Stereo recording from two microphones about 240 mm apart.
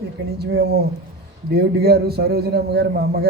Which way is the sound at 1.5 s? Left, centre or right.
Right.